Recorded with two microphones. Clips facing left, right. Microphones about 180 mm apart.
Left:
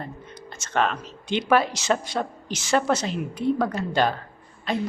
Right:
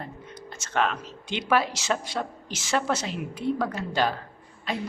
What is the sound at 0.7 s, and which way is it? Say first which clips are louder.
A woman's voice: left 2 dB; 5° right (ahead or behind).